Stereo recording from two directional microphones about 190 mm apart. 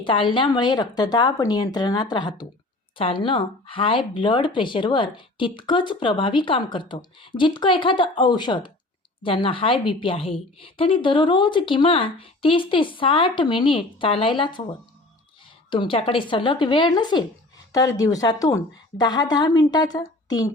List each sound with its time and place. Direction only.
0.0 s speech: 25° left (ahead or behind)
15.7 s speech: 25° left (ahead or behind)